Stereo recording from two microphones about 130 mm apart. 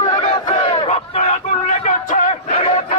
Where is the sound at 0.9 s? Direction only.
60° left (ahead or behind).